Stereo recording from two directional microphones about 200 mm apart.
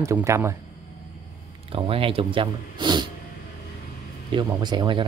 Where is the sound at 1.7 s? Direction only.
25° right (ahead or behind).